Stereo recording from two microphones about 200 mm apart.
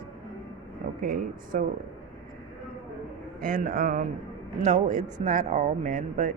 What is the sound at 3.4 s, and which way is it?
Speech, 45° right (ahead or behind).